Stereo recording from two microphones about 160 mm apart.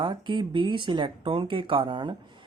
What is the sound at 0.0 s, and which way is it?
Speech, 30° right (ahead or behind).